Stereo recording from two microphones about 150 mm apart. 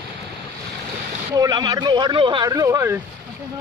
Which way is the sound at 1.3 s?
25° right (ahead or behind).